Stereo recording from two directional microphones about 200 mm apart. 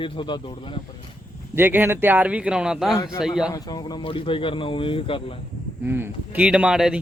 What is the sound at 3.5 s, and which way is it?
Speech, 20° left (ahead or behind).